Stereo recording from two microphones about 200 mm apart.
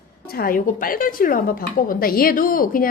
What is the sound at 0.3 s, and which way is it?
A woman's voice, 45° left (ahead or behind).